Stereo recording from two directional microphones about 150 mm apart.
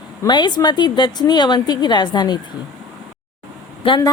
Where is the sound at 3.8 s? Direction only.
30° left (ahead or behind).